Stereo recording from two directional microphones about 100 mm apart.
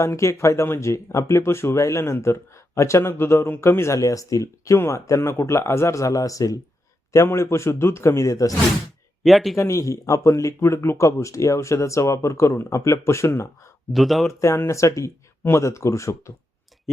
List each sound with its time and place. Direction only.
0.0 s speech: 30° left (ahead or behind)
9.2 s speech: centre (ahead or behind)
9.6 s speech: 30° left (ahead or behind)
13.9 s speech: centre (ahead or behind)
14.4 s speech: 30° left (ahead or behind)